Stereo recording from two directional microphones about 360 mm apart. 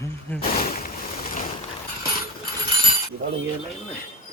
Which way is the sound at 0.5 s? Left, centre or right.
Left.